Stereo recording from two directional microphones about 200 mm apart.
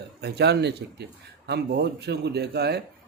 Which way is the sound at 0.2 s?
55° right (ahead or behind).